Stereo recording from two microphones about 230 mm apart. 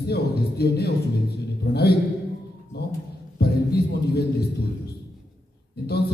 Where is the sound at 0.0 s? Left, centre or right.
Left.